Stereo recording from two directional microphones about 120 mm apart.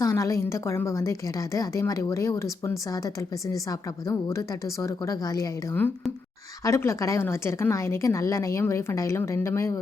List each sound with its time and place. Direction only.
0.0 s a woman's voice: 25° left (ahead or behind)
4.3 s a woman's voice: 25° left (ahead or behind)
6.7 s a woman's voice: 25° left (ahead or behind)